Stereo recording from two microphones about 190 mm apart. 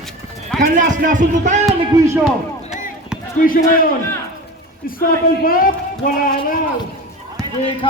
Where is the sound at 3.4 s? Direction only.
45° left (ahead or behind).